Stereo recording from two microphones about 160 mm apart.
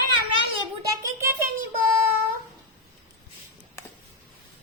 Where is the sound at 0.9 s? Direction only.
20° right (ahead or behind).